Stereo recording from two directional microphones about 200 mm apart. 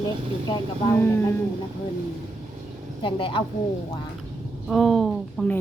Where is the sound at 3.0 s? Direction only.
25° left (ahead or behind).